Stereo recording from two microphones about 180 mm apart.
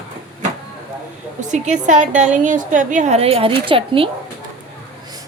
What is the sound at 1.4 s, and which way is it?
A woman's voice, 40° right (ahead or behind).